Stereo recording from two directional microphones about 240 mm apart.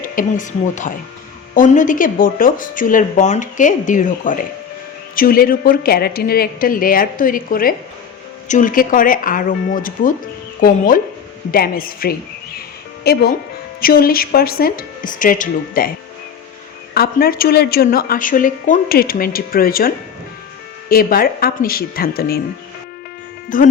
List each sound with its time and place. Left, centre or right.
0.2 s a woman's voice: left
16.9 s a woman's voice: left
20.9 s a woman's voice: left
23.5 s a woman's voice: left